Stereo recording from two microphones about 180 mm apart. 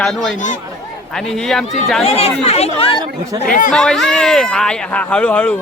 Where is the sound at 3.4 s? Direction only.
50° left (ahead or behind).